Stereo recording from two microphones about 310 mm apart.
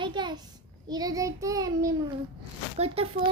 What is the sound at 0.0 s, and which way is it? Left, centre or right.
A child's voice, centre.